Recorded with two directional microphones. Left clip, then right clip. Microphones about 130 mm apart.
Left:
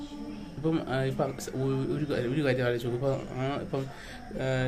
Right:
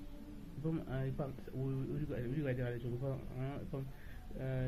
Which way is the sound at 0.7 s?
30° left (ahead or behind).